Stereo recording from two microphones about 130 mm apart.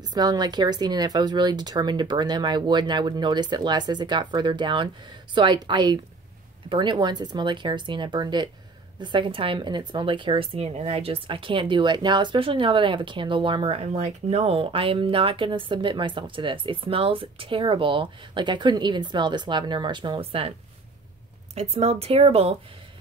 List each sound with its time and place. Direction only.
0.0 s a woman's voice: 30° right (ahead or behind)
21.5 s speech: 55° right (ahead or behind)